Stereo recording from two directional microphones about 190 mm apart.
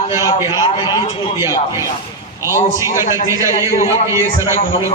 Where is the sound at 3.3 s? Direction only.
15° right (ahead or behind).